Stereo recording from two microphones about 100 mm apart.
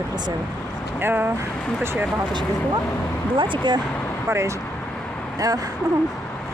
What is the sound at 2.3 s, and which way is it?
Speech, 50° right (ahead or behind).